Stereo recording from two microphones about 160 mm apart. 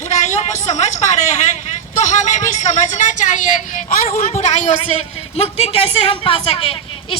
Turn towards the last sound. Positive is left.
turn(degrees=40)  # may be behind; listen again after turning